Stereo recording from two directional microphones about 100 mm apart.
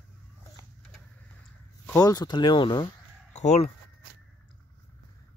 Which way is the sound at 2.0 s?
40° left (ahead or behind).